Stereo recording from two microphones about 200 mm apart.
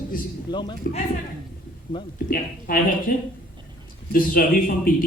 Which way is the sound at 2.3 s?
45° left (ahead or behind).